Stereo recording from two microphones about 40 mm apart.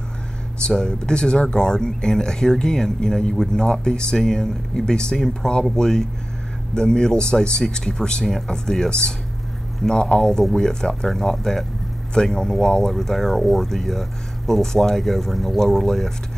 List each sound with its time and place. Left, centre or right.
0.6 s speech: left